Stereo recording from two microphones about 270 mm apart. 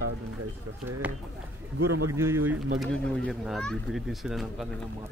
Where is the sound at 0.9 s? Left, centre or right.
Centre.